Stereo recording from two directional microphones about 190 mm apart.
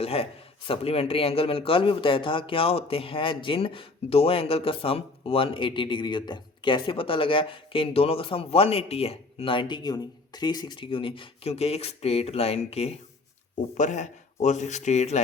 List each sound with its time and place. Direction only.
0.0 s a man's voice: 30° left (ahead or behind)